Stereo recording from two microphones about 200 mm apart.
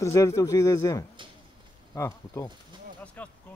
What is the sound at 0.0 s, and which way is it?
Speech, 15° left (ahead or behind).